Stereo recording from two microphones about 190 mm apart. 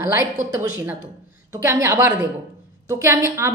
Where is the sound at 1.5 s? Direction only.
15° right (ahead or behind).